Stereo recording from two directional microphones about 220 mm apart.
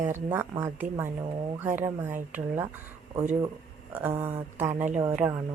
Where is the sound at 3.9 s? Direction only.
10° right (ahead or behind).